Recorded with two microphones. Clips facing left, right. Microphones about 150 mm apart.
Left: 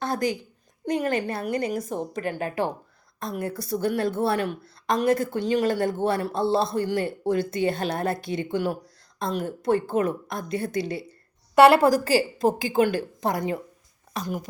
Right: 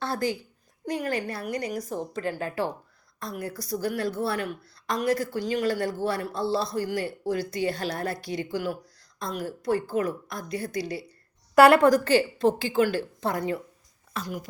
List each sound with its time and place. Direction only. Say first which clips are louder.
0.0 s a woman's voice: left 2 dB; 15° left (ahead or behind)
11.5 s a woman's voice: left 1 dB; centre (ahead or behind)